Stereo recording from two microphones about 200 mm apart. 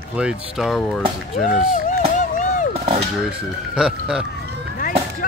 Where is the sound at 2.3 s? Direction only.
40° left (ahead or behind).